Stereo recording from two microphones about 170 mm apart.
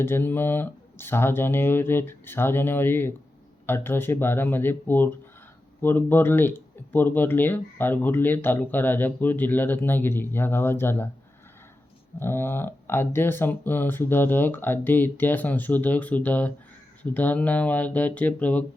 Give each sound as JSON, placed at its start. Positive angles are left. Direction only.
{"t": 0.0, "sound": "speech", "side_deg": 15}
{"t": 12.2, "sound": "speech", "side_deg": 15}